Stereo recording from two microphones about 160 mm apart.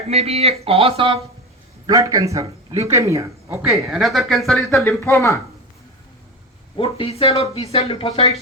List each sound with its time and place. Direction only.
0.1 s speech: 40° right (ahead or behind)
1.9 s speech: 20° right (ahead or behind)
3.8 s speech: centre (ahead or behind)
4.8 s speech: 15° left (ahead or behind)
6.7 s speech: 35° left (ahead or behind)